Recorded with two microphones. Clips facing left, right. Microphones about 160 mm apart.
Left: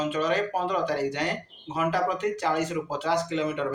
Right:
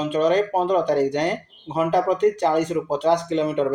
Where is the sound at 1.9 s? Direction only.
35° right (ahead or behind).